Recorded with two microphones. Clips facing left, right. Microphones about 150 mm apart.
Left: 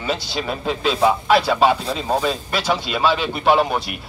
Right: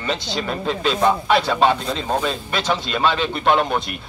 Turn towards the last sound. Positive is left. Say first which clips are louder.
# left 1 dB
turn(degrees=5)  # may be behind; listen again after turning